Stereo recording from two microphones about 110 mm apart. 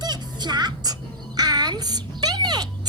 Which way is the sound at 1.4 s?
40° right (ahead or behind).